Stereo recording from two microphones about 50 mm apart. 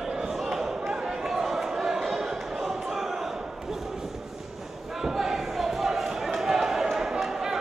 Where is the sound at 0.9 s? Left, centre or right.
Centre.